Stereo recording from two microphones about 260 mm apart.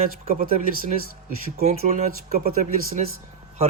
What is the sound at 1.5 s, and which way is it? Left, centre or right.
Speech, right.